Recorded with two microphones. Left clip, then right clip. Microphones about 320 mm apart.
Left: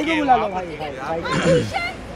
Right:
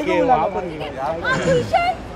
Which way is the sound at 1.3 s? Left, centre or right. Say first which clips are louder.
Even; centre.